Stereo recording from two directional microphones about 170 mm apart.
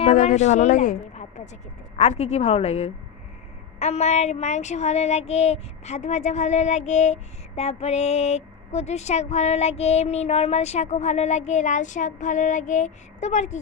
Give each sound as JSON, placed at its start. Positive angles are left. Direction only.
{"t": 0.0, "sound": "a woman's voice", "side_deg": 40}
{"t": 2.0, "sound": "child singing", "side_deg": 40}